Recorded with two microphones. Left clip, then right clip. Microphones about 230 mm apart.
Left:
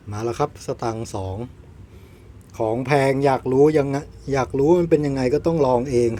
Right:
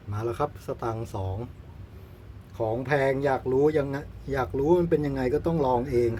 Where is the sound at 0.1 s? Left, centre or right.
Left.